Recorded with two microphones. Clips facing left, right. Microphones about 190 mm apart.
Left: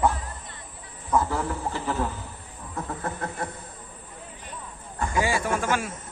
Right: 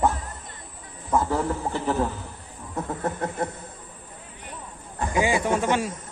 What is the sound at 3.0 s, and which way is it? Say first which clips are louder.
Speech: right 6 dB; 20° right (ahead or behind).